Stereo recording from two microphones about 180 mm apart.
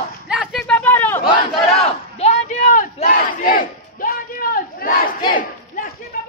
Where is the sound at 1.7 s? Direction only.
35° left (ahead or behind).